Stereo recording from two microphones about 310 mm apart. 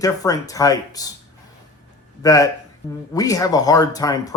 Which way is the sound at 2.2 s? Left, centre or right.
Centre.